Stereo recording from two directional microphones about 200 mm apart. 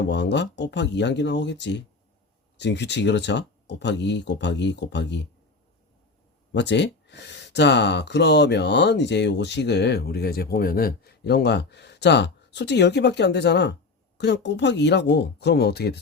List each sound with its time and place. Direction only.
0.1 s speech: 60° left (ahead or behind)
6.5 s speech: 60° left (ahead or behind)